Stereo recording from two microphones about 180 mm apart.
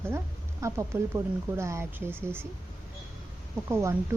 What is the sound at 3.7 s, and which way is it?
Speech, 15° right (ahead or behind).